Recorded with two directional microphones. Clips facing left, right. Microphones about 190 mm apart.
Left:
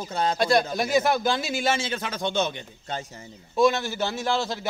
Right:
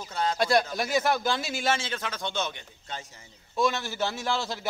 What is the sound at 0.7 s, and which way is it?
Speech, centre (ahead or behind).